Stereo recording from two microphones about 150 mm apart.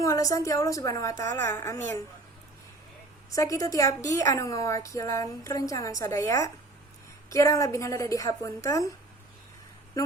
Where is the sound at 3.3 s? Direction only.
20° left (ahead or behind).